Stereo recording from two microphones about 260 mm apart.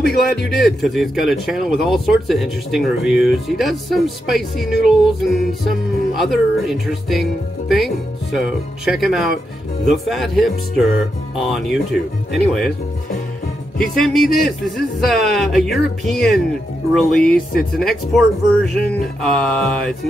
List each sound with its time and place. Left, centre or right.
0.0 s speech: centre
13.7 s speech: centre